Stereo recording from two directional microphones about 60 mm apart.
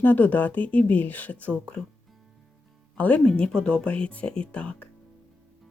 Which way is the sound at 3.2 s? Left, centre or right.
Centre.